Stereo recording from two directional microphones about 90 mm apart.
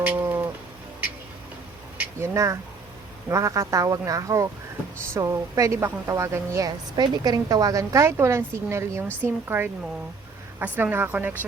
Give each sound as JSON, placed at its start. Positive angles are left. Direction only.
{"t": 0.0, "sound": "music", "side_deg": -20}
{"t": 2.1, "sound": "a woman's voice", "side_deg": -35}